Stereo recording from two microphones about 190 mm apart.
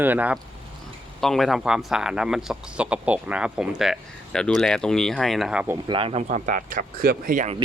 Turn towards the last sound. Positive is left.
turn(degrees=-40)  # may be behind; listen again after turning